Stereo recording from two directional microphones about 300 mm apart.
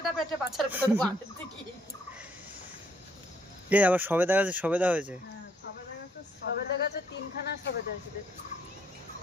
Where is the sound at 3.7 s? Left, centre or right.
Centre.